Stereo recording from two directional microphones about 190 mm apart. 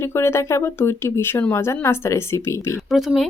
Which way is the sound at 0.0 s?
15° left (ahead or behind).